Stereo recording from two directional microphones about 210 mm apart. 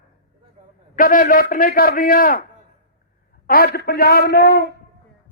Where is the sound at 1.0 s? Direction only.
40° left (ahead or behind).